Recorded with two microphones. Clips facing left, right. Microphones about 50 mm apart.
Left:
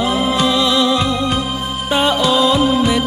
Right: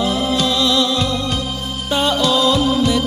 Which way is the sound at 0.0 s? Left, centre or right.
Centre.